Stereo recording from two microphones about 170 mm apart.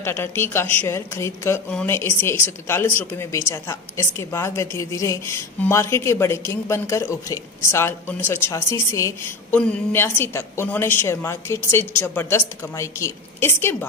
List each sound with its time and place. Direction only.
0.0 s speech: 15° left (ahead or behind)